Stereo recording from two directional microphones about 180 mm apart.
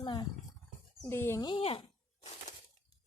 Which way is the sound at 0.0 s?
25° left (ahead or behind).